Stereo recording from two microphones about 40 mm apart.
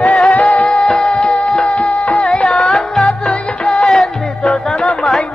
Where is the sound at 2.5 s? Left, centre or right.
Centre.